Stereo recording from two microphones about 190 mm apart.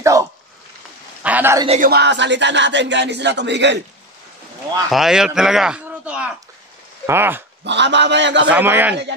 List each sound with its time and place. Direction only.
0.0 s a sound: 15° right (ahead or behind)
1.8 s speech: 55° right (ahead or behind)
4.8 s a man's voice: centre (ahead or behind)
7.6 s speech: 65° right (ahead or behind)
8.5 s a man's voice: 10° right (ahead or behind)